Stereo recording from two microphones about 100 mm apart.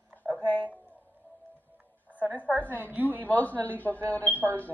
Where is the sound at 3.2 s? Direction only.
15° left (ahead or behind).